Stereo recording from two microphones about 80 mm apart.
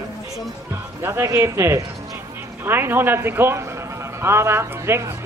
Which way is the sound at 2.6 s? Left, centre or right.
Right.